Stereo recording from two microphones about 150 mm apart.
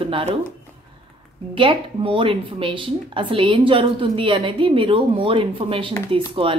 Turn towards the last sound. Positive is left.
turn(degrees=-35)  # may be behind; listen again after turning